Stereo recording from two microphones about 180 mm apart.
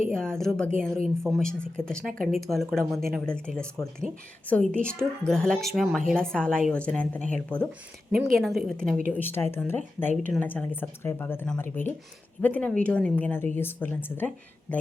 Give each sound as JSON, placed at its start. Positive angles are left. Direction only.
{"t": 0.1, "sound": "speech", "side_deg": 5}
{"t": 8.9, "sound": "speech", "side_deg": -50}
{"t": 9.1, "sound": "speech", "side_deg": 10}